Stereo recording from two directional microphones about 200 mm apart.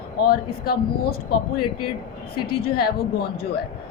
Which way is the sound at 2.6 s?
50° left (ahead or behind).